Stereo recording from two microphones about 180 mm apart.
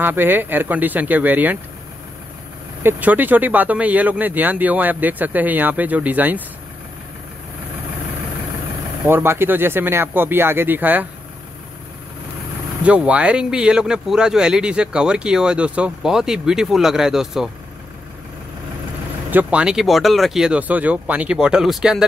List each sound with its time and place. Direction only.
0.0 s speech: 10° right (ahead or behind)
2.8 s speech: 10° right (ahead or behind)
9.0 s speech: 10° right (ahead or behind)
12.8 s speech: 5° right (ahead or behind)
19.3 s speech: 5° right (ahead or behind)